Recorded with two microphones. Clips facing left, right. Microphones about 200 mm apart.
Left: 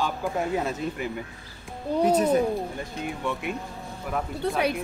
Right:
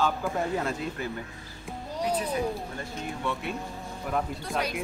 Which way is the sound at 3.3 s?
15° left (ahead or behind).